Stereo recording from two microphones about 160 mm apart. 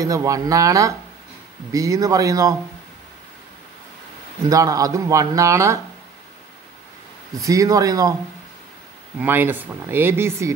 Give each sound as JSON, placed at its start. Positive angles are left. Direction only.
{"t": 0.0, "sound": "speech", "side_deg": -20}
{"t": 4.5, "sound": "speech", "side_deg": -20}
{"t": 7.3, "sound": "speech", "side_deg": -20}
{"t": 9.2, "sound": "speech", "side_deg": -10}